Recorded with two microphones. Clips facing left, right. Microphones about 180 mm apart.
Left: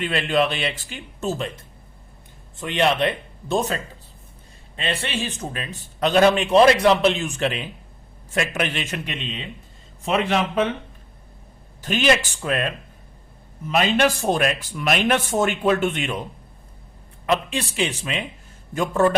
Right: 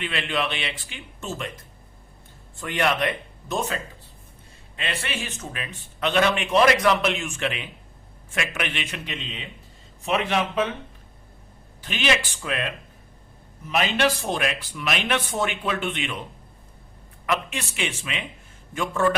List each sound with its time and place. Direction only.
0.0 s a man's voice: 40° left (ahead or behind)
4.8 s a man's voice: 30° left (ahead or behind)
11.8 s speech: 45° left (ahead or behind)
13.7 s speech: 45° left (ahead or behind)
17.2 s a man's voice: 30° left (ahead or behind)